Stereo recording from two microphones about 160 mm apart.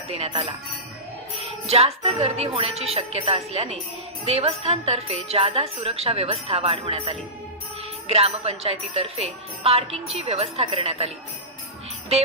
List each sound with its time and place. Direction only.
0.1 s jingle bell: 40° right (ahead or behind)